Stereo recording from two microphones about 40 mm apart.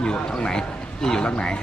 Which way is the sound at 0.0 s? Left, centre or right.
Left.